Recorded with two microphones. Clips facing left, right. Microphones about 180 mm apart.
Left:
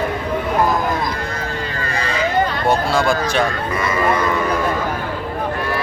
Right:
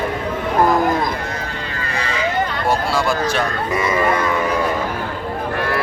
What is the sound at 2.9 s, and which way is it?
Speech, 5° right (ahead or behind).